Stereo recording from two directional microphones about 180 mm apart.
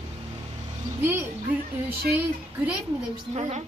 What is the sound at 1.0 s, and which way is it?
Speech, 10° right (ahead or behind).